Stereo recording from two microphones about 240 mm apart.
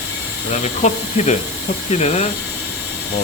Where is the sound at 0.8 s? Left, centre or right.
Left.